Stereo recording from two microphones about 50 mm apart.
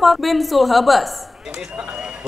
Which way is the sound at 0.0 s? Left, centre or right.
Centre.